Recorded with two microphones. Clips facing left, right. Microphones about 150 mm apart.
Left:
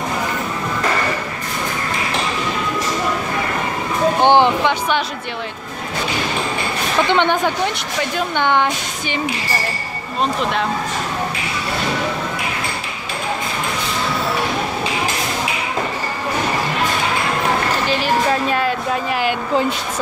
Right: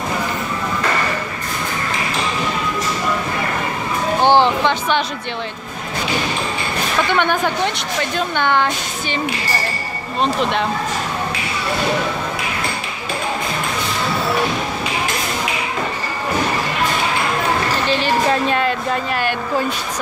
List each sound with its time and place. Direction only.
4.2 s music: 15° left (ahead or behind)
7.1 s a woman's voice: 20° left (ahead or behind)
8.4 s speech: 15° left (ahead or behind)
17.8 s speech: 5° left (ahead or behind)